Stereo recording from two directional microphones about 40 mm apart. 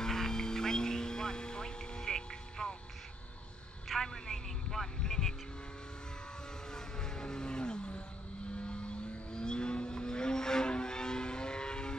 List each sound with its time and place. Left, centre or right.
0.0 s music: centre
3.9 s a sound: centre
6.7 s vehicle: centre